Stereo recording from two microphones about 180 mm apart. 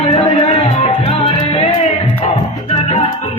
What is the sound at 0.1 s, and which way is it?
Music, 30° left (ahead or behind).